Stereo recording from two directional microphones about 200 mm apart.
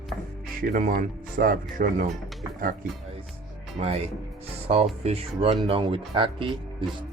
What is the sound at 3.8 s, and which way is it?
Speech, 30° right (ahead or behind).